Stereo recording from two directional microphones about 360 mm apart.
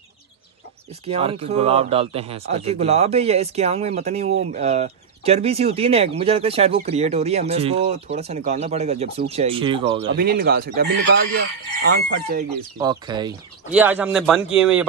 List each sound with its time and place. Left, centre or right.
1.0 s a man's voice: centre
10.0 s speech: right
12.7 s speech: centre